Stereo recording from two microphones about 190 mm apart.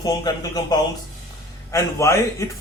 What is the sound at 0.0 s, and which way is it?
Speech, 20° left (ahead or behind).